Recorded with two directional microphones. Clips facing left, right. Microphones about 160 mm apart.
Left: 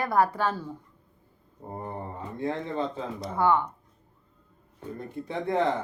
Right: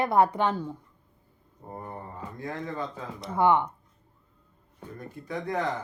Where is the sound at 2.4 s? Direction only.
25° left (ahead or behind).